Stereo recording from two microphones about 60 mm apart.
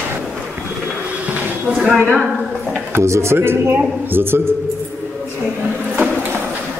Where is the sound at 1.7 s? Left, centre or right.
Centre.